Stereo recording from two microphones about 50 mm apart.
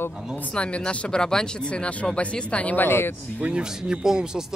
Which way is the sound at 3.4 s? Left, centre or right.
Right.